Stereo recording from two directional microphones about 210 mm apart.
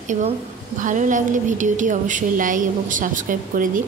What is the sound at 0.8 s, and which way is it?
A woman's voice, 35° right (ahead or behind).